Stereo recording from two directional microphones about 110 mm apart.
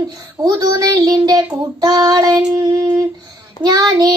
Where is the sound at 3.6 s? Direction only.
35° right (ahead or behind).